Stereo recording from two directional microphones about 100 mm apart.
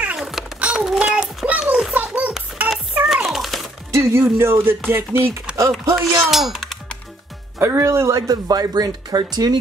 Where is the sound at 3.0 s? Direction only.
5° right (ahead or behind).